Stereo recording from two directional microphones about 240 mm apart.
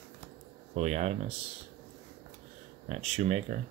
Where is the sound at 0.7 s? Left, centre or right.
Right.